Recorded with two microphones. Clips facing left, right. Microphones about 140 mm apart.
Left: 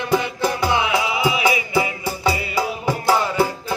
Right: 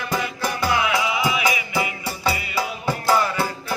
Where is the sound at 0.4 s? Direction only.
25° left (ahead or behind).